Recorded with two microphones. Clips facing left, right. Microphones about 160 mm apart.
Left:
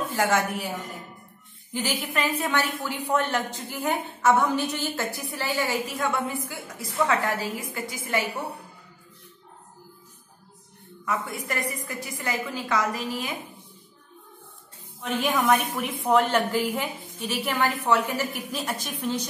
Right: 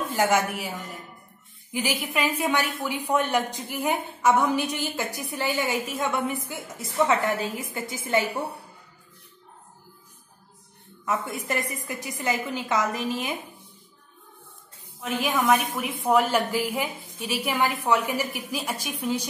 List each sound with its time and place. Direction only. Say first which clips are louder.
0.1 s a woman's voice: right 2 dB; 20° right (ahead or behind)
1.7 s a woman's voice: right 1 dB; 10° right (ahead or behind)
11.1 s a woman's voice: right 2 dB; 25° right (ahead or behind)
15.0 s a woman's voice: left 1 dB; 5° right (ahead or behind)